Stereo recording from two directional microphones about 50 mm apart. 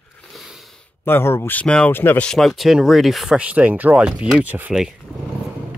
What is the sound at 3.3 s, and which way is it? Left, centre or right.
Speech, right.